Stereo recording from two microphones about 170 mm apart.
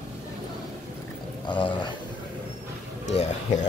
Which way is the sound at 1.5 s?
30° left (ahead or behind).